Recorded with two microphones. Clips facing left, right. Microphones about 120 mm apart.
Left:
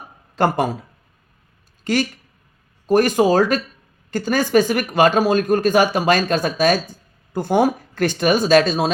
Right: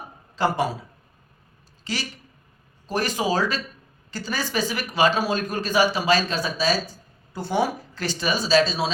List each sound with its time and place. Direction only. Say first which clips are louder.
0.3 s a man's voice: left 4 dB; 50° left (ahead or behind)
1.8 s a man's voice: left 11 dB; 50° left (ahead or behind)